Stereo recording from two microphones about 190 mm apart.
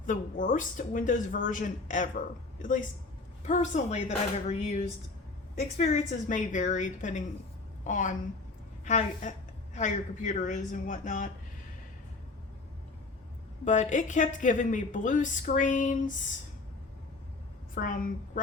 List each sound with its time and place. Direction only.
0.0 s a woman's voice: 45° left (ahead or behind)
13.7 s speech: 40° left (ahead or behind)
17.7 s speech: 45° left (ahead or behind)